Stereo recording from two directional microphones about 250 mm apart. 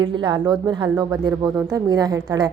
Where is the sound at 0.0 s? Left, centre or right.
Centre.